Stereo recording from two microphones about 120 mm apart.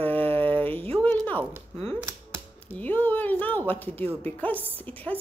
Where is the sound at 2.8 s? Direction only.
15° left (ahead or behind).